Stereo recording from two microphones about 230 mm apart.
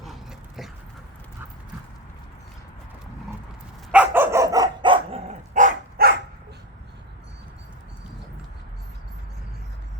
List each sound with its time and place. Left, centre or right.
0.0 s dog: centre
3.9 s dog: centre
5.5 s dog: right